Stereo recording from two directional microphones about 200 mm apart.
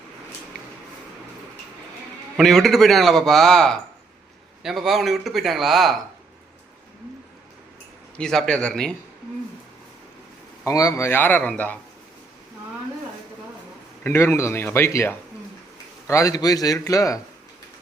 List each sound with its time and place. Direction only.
2.4 s a man's voice: centre (ahead or behind)
8.2 s a man's voice: 5° left (ahead or behind)
10.6 s speech: 15° left (ahead or behind)
14.0 s speech: 10° left (ahead or behind)